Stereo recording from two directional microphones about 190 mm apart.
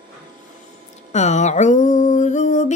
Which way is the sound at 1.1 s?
35° left (ahead or behind).